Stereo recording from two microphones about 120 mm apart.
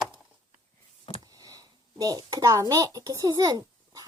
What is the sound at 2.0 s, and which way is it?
A child's voice, 30° right (ahead or behind).